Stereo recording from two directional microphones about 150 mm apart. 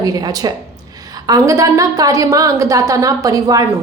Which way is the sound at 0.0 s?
25° right (ahead or behind).